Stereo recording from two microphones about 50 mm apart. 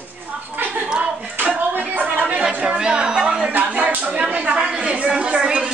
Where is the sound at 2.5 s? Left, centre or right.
Right.